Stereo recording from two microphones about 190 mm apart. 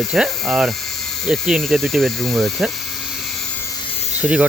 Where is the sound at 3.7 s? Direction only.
30° left (ahead or behind).